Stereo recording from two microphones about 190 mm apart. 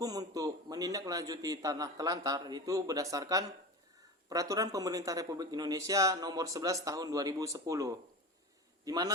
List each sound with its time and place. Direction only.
0.0 s a man's voice: 20° right (ahead or behind)